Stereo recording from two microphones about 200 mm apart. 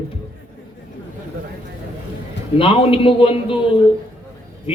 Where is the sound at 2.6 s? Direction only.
25° left (ahead or behind).